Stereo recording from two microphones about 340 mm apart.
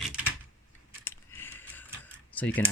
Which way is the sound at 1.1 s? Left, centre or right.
Centre.